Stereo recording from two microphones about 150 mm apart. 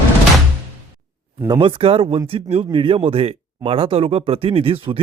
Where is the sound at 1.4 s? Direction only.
35° right (ahead or behind).